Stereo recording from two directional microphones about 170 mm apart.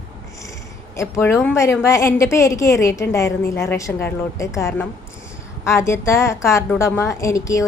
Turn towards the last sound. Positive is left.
turn(degrees=20)  # may be behind; listen again after turning